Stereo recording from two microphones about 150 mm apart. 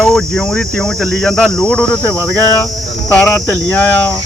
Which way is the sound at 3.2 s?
15° left (ahead or behind).